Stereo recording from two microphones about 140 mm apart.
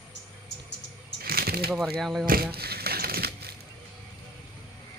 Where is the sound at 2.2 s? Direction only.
90° right.